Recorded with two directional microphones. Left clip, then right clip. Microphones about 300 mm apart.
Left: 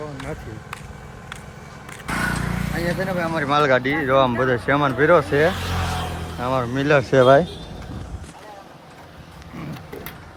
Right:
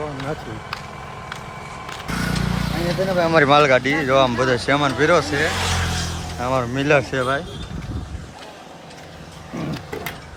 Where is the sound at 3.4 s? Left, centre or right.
Centre.